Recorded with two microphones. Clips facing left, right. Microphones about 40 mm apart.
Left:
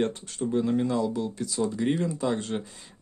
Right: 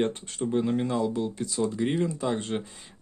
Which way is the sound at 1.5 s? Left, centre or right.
Centre.